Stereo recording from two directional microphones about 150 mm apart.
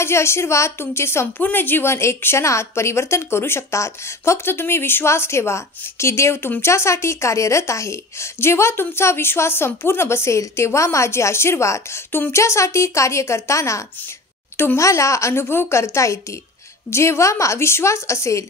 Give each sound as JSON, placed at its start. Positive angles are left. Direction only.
{"t": 0.0, "sound": "a woman's voice", "side_deg": 15}